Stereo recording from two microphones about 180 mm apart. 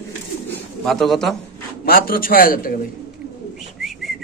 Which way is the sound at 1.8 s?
55° left (ahead or behind).